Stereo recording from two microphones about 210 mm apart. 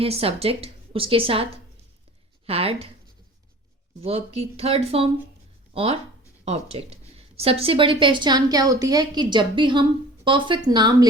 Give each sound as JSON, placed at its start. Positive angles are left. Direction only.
{"t": 0.0, "sound": "a woman's voice", "side_deg": -25}
{"t": 2.5, "sound": "a woman's voice", "side_deg": -25}
{"t": 4.0, "sound": "a woman's voice", "side_deg": -30}